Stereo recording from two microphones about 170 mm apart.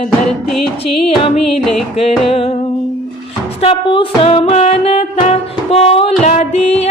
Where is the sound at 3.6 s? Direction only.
30° left (ahead or behind).